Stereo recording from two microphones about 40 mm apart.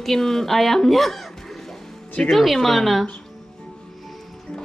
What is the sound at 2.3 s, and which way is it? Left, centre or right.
Speech, centre.